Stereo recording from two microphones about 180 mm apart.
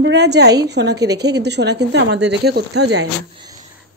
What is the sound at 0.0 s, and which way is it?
Speech, 70° right (ahead or behind).